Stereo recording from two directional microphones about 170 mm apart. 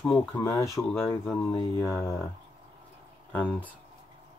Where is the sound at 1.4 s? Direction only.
15° left (ahead or behind).